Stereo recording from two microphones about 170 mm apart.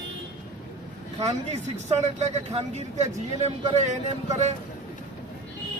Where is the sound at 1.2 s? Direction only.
40° right (ahead or behind).